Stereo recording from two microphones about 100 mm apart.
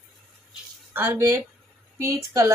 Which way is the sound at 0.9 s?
20° right (ahead or behind).